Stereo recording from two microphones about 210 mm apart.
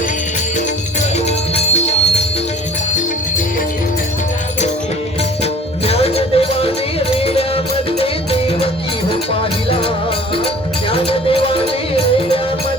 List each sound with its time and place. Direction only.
1.5 s music: 30° left (ahead or behind)
5.4 s music: 30° left (ahead or behind)